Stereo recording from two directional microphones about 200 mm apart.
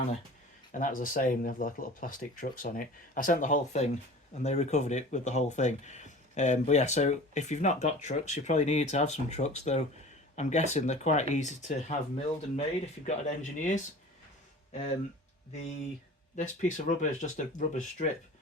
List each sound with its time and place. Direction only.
0.7 s speech: 40° left (ahead or behind)
16.3 s speech: 40° left (ahead or behind)